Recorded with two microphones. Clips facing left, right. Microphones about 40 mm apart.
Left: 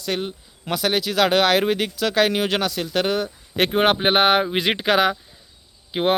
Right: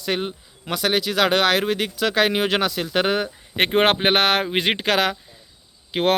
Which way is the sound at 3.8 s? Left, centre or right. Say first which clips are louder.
Left 2 dB; right.